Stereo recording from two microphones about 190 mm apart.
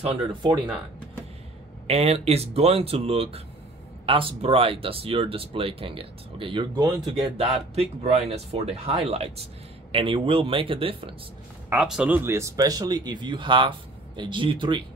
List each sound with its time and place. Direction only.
0.0 s speech: 25° right (ahead or behind)
1.9 s speech: 35° right (ahead or behind)
11.7 s speech: 5° right (ahead or behind); by 14.8 s 25° right (ahead or behind)